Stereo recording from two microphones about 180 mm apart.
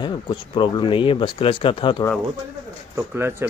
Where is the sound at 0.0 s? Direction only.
25° left (ahead or behind).